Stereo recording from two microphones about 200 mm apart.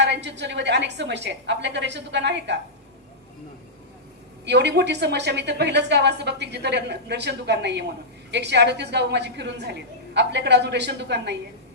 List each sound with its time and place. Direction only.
0.0 s a woman's voice: 60° right (ahead or behind)
4.4 s a woman's voice: 60° right (ahead or behind)